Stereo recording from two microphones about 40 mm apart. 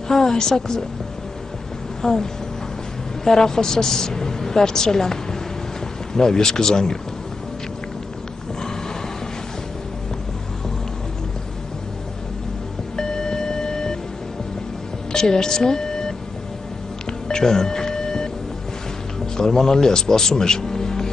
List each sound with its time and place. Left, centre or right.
0.1 s a woman's voice: centre
2.0 s speech: centre
3.3 s a woman's voice: centre
12.9 s a sound: centre
15.1 s speech: centre
17.3 s music: centre
19.3 s a man's voice: centre